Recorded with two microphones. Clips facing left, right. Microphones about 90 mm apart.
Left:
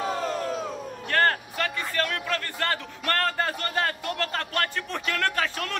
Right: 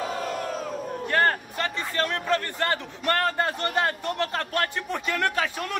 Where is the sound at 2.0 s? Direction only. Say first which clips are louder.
Right 4 dB; 20° right (ahead or behind).